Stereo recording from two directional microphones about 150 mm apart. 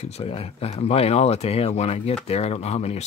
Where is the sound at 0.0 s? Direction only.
40° left (ahead or behind).